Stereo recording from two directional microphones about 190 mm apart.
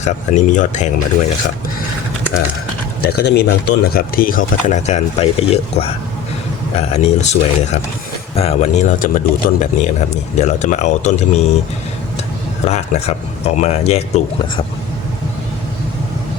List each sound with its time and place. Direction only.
0.0 s speech: 40° left (ahead or behind)
3.0 s speech: 55° left (ahead or behind); by 11.5 s 35° left (ahead or behind)
12.6 s speech: 35° left (ahead or behind)